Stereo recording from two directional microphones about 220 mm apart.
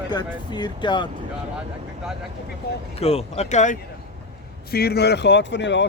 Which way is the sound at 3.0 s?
30° left (ahead or behind).